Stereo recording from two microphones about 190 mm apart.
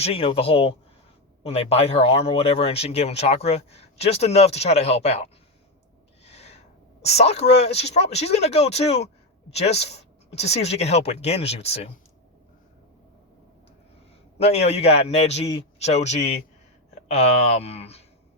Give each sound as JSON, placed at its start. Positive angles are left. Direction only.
{"t": 0.0, "sound": "speech", "side_deg": 30}
{"t": 6.2, "sound": "owl", "side_deg": 35}
{"t": 7.0, "sound": "speech", "side_deg": 35}
{"t": 14.3, "sound": "speech", "side_deg": 30}